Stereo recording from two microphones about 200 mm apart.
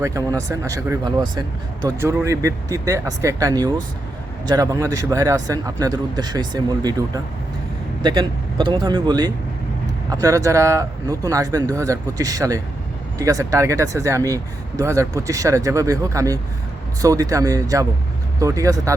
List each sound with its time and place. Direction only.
0.0 s speech: 15° right (ahead or behind)
8.0 s speech: 25° right (ahead or behind)